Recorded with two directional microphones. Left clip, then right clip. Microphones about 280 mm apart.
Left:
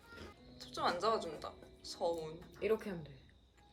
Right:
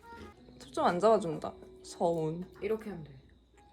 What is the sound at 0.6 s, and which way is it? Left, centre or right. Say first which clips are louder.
A woman's voice: right 8 dB; centre.